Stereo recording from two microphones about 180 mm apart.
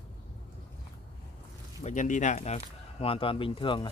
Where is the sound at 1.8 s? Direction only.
40° left (ahead or behind).